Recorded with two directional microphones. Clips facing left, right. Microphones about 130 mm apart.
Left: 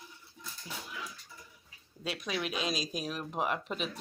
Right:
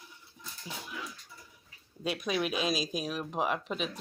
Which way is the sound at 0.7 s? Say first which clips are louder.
Right 1 dB; 20° right (ahead or behind).